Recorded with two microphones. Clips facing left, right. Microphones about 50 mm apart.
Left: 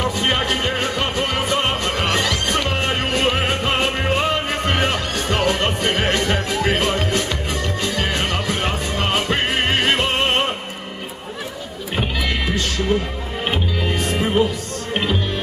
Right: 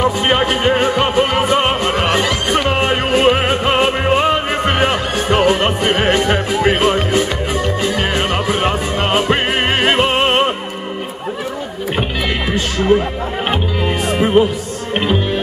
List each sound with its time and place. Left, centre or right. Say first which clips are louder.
0.0 s music: right 6 dB; centre
12.4 s music: right 9 dB; centre